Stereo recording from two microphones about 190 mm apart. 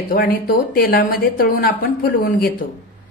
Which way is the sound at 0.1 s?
50° left (ahead or behind).